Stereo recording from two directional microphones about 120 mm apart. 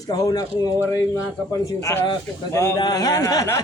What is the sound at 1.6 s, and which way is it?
Speech, 25° left (ahead or behind).